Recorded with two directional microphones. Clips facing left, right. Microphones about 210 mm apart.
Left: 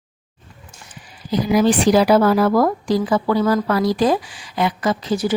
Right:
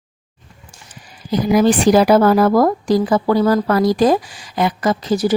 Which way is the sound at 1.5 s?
45° right (ahead or behind).